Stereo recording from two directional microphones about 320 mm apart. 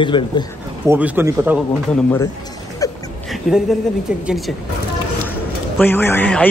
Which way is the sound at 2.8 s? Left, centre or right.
Centre.